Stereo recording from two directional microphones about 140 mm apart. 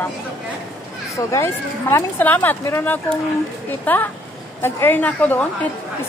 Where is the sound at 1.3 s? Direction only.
20° left (ahead or behind).